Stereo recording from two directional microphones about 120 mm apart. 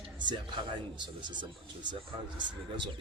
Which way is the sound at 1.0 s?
40° right (ahead or behind).